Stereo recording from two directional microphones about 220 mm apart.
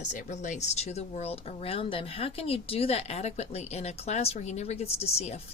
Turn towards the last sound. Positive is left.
turn(degrees=30)  # may be behind; listen again after turning